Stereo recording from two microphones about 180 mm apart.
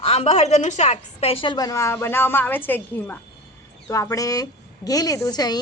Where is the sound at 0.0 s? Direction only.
35° left (ahead or behind).